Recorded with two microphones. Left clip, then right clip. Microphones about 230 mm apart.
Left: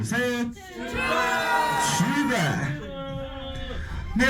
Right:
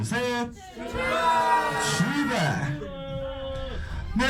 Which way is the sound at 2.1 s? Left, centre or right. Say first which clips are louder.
Left 1 dB; centre.